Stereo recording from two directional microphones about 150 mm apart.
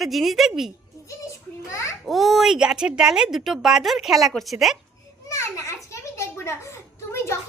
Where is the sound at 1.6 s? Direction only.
20° left (ahead or behind).